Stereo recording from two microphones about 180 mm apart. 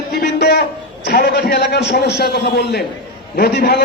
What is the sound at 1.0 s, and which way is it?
A man's voice, 60° left (ahead or behind).